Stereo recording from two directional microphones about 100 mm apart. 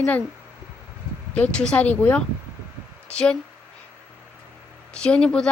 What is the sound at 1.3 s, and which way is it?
Speech, 10° left (ahead or behind).